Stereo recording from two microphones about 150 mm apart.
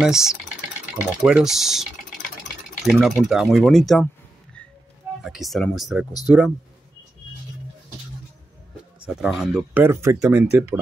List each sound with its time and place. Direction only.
0.0 s speech: 5° right (ahead or behind)
5.2 s speech: centre (ahead or behind)
9.0 s speech: 5° right (ahead or behind)
9.8 s speech: 20° right (ahead or behind)